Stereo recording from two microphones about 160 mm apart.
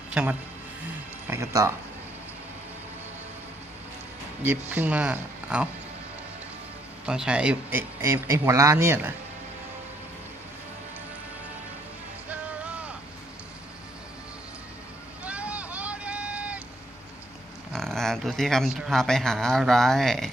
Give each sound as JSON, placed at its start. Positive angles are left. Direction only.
{"t": 0.1, "sound": "a man's voice", "side_deg": -10}
{"t": 4.4, "sound": "a man's voice", "side_deg": -10}
{"t": 7.0, "sound": "a man's voice", "side_deg": -5}
{"t": 12.3, "sound": "music", "side_deg": -10}
{"t": 15.2, "sound": "vehicle", "side_deg": -10}
{"t": 17.7, "sound": "speech", "side_deg": 5}